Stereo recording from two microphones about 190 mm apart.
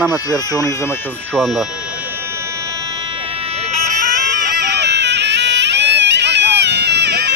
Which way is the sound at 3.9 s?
40° right (ahead or behind).